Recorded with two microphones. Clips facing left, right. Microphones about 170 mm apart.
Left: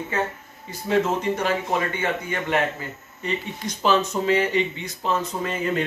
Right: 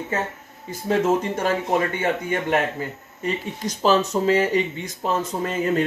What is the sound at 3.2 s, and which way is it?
Speech, 40° right (ahead or behind).